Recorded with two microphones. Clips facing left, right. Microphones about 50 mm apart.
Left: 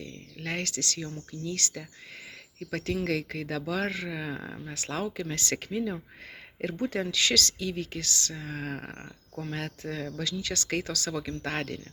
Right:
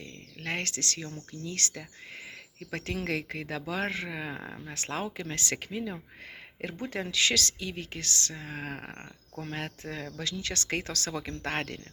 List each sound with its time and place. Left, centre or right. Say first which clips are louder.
0.0 s a sound: left 1 dB; right
1.5 s speech: left 1 dB; right
5.7 s speech: left 4 dB; centre
10.3 s speech: left 1 dB; right